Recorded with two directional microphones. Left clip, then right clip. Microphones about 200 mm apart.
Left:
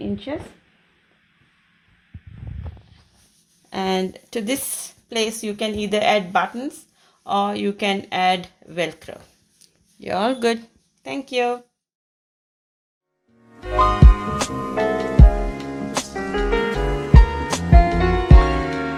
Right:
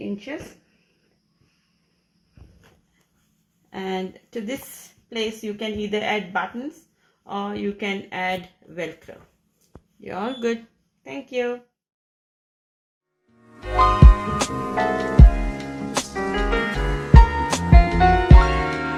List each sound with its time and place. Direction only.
0.3 s speech: 45° left (ahead or behind)
3.7 s speech: 50° left (ahead or behind)
9.6 s a sound: 50° left (ahead or behind)
11.0 s speech: 50° left (ahead or behind)
13.5 s music: centre (ahead or behind)